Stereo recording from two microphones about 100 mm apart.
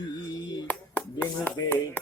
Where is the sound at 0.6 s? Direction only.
20° left (ahead or behind).